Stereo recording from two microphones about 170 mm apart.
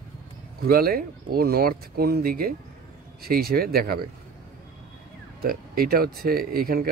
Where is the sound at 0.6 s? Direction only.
65° right (ahead or behind).